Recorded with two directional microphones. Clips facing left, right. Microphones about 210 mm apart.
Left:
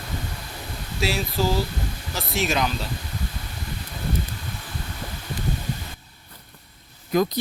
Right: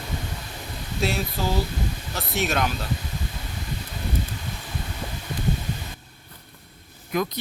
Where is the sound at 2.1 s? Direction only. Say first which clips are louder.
Left 1 dB; centre (ahead or behind).